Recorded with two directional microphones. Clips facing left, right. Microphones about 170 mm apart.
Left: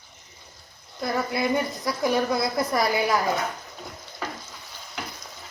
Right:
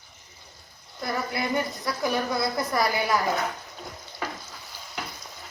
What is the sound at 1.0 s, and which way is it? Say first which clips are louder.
Speech: left 4 dB; 20° left (ahead or behind).